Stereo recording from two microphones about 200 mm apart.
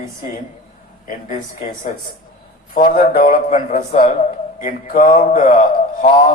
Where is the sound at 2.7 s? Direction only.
45° left (ahead or behind).